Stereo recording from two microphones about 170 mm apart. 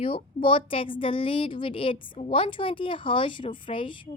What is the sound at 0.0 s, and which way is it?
Speech, 30° left (ahead or behind).